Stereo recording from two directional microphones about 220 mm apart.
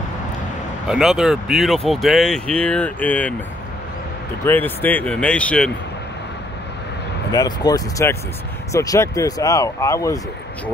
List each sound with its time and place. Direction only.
0.8 s speech: centre (ahead or behind)
4.5 s speech: 10° left (ahead or behind)
7.3 s speech: 15° left (ahead or behind)